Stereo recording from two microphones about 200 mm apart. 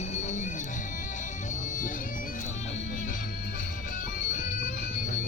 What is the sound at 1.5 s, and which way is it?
Music, 40° left (ahead or behind).